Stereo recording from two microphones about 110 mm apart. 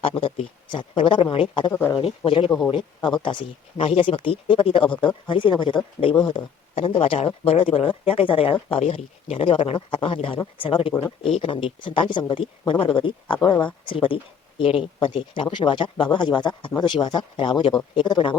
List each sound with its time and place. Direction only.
0.0 s speech: 55° left (ahead or behind)
1.7 s speech: 25° left (ahead or behind)
2.2 s speech: 50° left (ahead or behind)
2.5 s a man's voice: 5° left (ahead or behind)
3.8 s speech: 55° left (ahead or behind)
8.7 s speech: 70° left (ahead or behind); by 18.3 s 45° left (ahead or behind)